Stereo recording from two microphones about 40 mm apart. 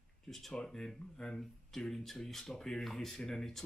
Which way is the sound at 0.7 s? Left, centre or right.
Centre.